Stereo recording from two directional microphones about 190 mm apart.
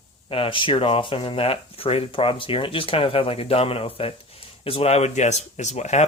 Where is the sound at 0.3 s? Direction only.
30° left (ahead or behind).